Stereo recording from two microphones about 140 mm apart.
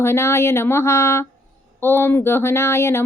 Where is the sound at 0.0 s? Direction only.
20° left (ahead or behind).